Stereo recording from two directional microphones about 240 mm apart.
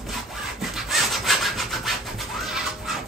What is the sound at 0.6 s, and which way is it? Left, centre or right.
Rub, centre.